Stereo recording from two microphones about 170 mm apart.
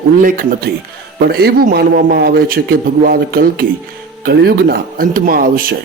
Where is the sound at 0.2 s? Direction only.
55° right (ahead or behind).